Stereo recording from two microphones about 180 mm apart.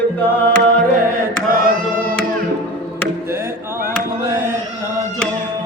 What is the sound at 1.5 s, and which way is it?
Singing, 50° right (ahead or behind).